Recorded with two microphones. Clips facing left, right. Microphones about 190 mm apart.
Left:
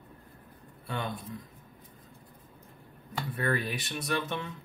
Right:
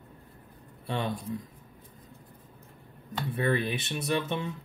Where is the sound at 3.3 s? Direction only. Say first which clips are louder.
Right 3 dB; 25° right (ahead or behind).